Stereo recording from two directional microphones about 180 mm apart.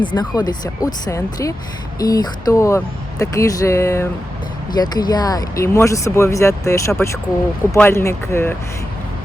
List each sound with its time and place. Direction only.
0.0 s speech: 25° left (ahead or behind)